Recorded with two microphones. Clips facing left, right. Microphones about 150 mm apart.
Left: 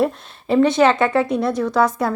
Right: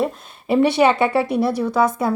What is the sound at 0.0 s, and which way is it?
A woman's voice, 10° right (ahead or behind).